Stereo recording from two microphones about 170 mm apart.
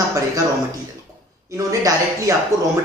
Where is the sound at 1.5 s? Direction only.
20° right (ahead or behind).